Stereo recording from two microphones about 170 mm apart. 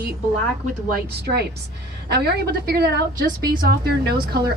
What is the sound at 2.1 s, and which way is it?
A woman's voice, 70° right (ahead or behind).